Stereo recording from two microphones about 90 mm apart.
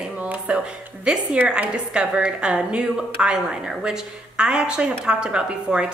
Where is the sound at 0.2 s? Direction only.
15° right (ahead or behind).